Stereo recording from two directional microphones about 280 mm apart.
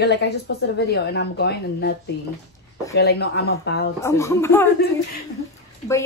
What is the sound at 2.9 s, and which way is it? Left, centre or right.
Speech, left.